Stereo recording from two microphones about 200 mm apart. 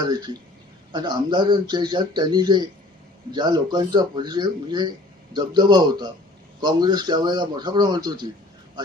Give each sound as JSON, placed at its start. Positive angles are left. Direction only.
{"t": 0.0, "sound": "speech", "side_deg": -20}